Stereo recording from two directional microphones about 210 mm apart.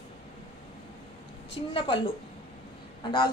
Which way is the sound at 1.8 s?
25° left (ahead or behind).